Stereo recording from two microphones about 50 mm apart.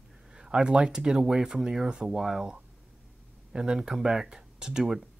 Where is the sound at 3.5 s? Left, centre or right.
Centre.